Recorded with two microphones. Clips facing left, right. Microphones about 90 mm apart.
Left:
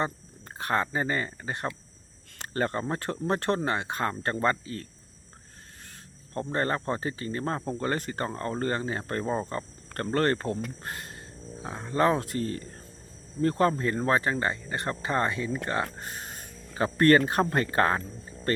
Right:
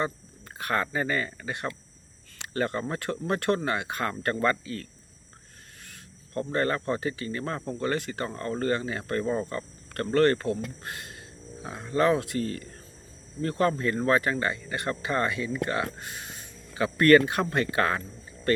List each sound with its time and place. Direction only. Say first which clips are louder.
0.0 s speech: even; 30° left (ahead or behind)